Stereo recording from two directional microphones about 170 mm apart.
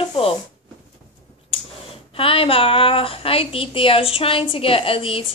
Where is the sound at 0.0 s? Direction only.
30° left (ahead or behind).